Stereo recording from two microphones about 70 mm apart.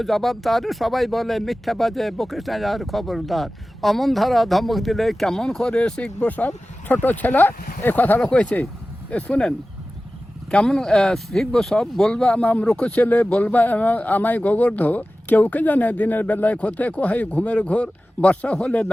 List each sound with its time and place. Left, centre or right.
0.0 s speech: centre; by 8.2 s left
8.2 s speech: centre